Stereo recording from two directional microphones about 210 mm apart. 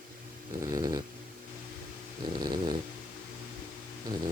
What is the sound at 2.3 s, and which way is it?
Dog, 20° right (ahead or behind).